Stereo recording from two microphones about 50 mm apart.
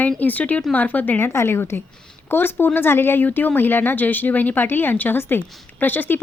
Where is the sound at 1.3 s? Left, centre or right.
Left.